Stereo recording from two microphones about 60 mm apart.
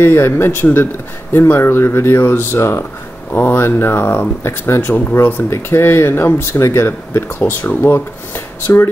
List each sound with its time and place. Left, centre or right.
0.0 s speech: left
5.5 s speech: left
6.9 s speech: left